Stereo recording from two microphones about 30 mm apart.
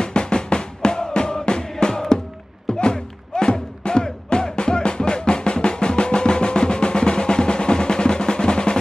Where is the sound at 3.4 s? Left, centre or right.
Left.